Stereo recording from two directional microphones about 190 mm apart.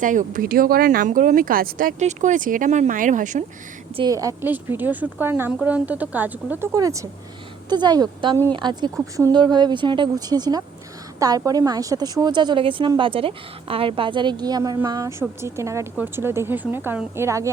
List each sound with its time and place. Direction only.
0.0 s speech: 45° right (ahead or behind)
3.9 s a woman's voice: 20° right (ahead or behind)